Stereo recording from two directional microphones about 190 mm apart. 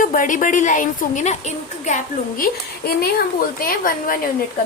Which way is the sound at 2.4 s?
55° left (ahead or behind).